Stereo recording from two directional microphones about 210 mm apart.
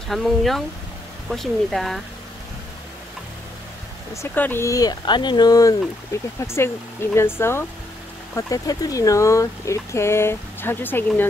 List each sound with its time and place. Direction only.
0.1 s speech: centre (ahead or behind)
4.1 s speech: 10° left (ahead or behind)